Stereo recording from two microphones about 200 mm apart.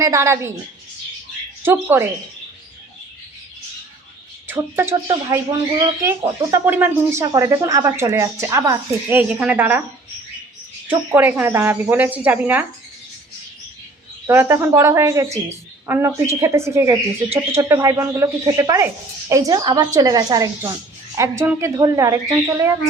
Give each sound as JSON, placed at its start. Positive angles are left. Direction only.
{"t": 0.0, "sound": "speech", "side_deg": -15}
{"t": 1.6, "sound": "speech", "side_deg": -10}
{"t": 4.4, "sound": "speech", "side_deg": -10}
{"t": 10.8, "sound": "speech", "side_deg": -10}
{"t": 14.3, "sound": "a woman's voice", "side_deg": -10}